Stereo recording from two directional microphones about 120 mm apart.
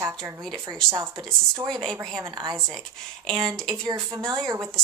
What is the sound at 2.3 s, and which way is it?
Speech, 40° right (ahead or behind).